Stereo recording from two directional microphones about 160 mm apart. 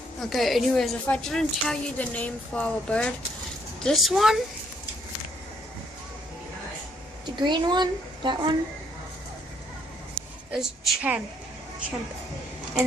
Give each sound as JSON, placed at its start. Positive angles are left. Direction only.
{"t": 0.2, "sound": "a woman's voice", "side_deg": 0}
{"t": 7.3, "sound": "a child's voice", "side_deg": -30}
{"t": 10.2, "sound": "a sound", "side_deg": -5}
{"t": 10.5, "sound": "a woman's voice", "side_deg": -5}